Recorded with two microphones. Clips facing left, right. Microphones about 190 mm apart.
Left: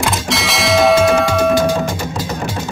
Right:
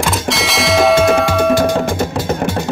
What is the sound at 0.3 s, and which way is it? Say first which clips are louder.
Music: right 1 dB; centre (ahead or behind).